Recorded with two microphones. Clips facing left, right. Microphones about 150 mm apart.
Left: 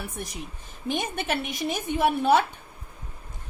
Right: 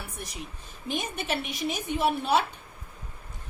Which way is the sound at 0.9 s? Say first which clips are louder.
Left 2 dB; 50° left (ahead or behind).